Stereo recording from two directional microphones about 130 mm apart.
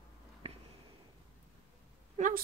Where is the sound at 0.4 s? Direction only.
50° right (ahead or behind).